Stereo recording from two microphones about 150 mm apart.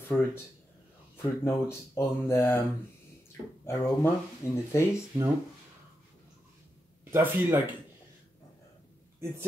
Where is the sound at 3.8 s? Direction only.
15° left (ahead or behind).